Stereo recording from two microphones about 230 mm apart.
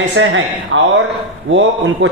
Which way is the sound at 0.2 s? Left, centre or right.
Right.